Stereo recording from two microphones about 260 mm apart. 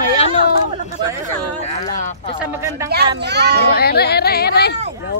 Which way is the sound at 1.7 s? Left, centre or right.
Left.